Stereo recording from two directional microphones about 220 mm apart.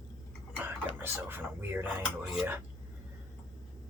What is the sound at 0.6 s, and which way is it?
Speech, 10° right (ahead or behind).